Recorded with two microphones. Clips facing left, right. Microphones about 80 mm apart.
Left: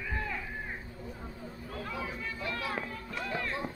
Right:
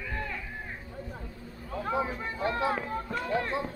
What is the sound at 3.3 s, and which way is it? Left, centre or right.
Music, right.